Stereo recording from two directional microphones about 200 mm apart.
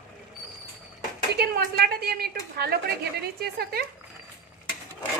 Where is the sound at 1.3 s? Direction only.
50° right (ahead or behind).